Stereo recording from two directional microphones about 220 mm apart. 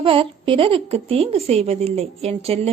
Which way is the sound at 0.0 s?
25° right (ahead or behind).